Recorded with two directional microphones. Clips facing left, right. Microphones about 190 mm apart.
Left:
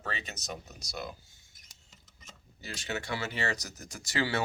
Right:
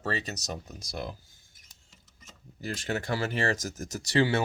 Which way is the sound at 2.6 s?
50° right (ahead or behind).